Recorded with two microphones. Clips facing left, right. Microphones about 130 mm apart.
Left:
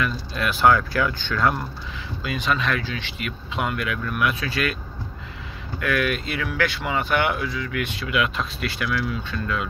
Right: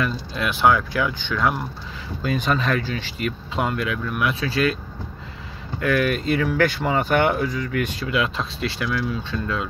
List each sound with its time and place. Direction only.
0.0 s speech: 20° right (ahead or behind)
2.2 s speech: 45° right (ahead or behind)
5.8 s speech: 35° right (ahead or behind)